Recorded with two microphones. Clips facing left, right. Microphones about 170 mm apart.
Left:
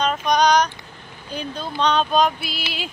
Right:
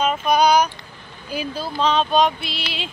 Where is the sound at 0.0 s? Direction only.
5° right (ahead or behind).